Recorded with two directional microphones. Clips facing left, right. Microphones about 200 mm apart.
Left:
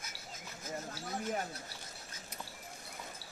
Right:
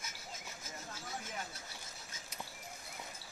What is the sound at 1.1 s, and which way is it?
Speech, 55° left (ahead or behind).